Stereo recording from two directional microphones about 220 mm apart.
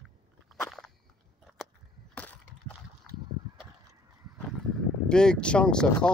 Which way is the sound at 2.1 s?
5° left (ahead or behind).